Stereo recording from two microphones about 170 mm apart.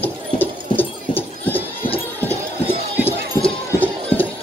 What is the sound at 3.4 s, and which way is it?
Clip-clop, 10° left (ahead or behind).